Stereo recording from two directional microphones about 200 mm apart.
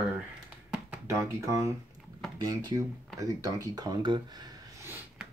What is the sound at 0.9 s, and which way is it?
Speech, 15° right (ahead or behind).